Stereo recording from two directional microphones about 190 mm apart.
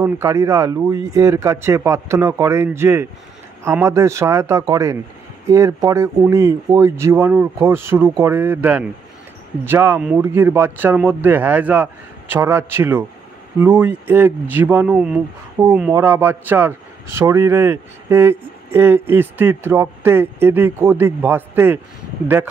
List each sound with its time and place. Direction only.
0.0 s a man's voice: 15° right (ahead or behind)